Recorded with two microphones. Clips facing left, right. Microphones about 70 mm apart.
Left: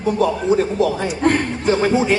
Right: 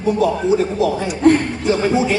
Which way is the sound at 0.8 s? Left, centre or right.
Left.